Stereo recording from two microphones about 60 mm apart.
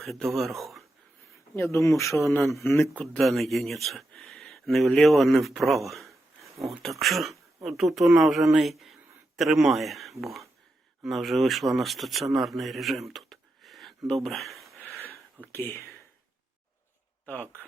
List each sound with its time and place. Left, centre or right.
0.0 s speech: centre
1.5 s speech: left
2.4 s speech: centre
2.6 s speech: left
3.0 s speech: centre
15.4 s speech: left
17.2 s speech: left